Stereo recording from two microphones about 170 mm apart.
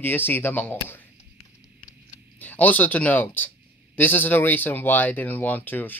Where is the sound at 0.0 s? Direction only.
10° left (ahead or behind).